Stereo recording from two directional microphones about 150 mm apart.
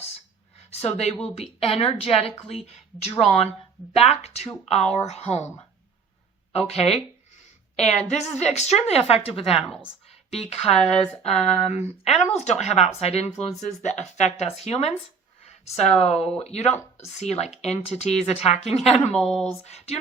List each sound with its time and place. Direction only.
0.7 s a woman's voice: 45° left (ahead or behind)
6.7 s speech: 40° left (ahead or behind)
9.6 s speech: 5° left (ahead or behind)
10.3 s speech: 45° left (ahead or behind)
19.1 s speech: 5° left (ahead or behind)
19.5 s speech: 45° left (ahead or behind)